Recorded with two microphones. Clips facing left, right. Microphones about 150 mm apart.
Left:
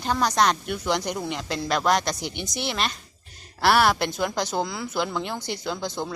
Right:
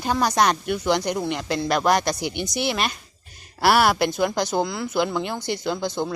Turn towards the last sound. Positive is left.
turn(degrees=0)  # may be behind; listen again after turning